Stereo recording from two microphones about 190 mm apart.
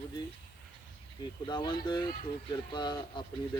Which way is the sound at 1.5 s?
25° left (ahead or behind).